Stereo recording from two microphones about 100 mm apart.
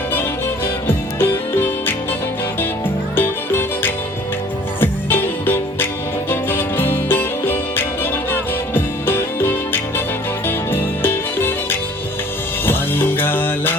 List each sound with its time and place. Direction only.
0.1 s music: 20° left (ahead or behind)